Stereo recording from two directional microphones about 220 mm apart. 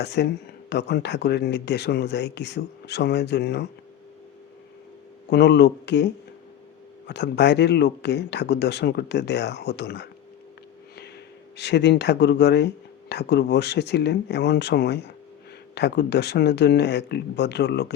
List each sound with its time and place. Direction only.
0.0 s speech: 50° left (ahead or behind)
5.3 s speech: 50° left (ahead or behind)
7.1 s speech: 50° left (ahead or behind)
11.5 s speech: 50° left (ahead or behind)